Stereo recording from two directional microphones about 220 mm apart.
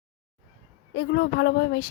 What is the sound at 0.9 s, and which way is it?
Speech, 50° left (ahead or behind).